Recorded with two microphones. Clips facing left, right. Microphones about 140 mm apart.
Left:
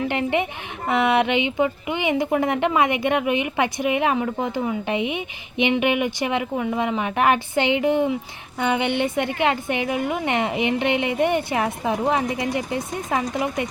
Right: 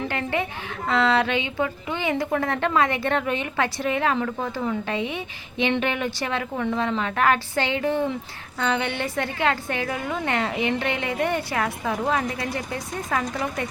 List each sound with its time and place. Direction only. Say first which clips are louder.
0.1 s a woman's voice: left 4 dB; 20° left (ahead or behind)